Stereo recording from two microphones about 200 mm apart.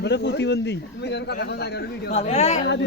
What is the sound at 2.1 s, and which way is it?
Speech, 35° left (ahead or behind).